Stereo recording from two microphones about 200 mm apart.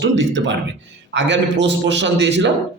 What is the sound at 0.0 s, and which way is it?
A man's voice, 65° right (ahead or behind).